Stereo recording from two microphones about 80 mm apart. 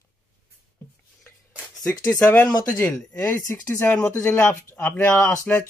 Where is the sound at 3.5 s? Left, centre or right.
Left.